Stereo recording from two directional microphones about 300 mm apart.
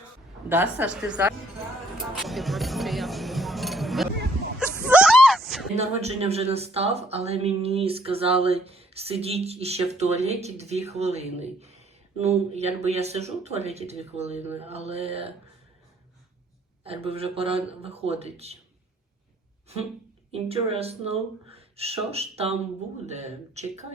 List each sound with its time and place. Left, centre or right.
0.4 s a woman's voice: centre
4.9 s a sound: centre
5.7 s speech: right
16.8 s speech: centre
20.3 s speech: centre